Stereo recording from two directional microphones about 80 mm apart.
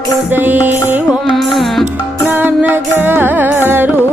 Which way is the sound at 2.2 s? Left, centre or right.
Right.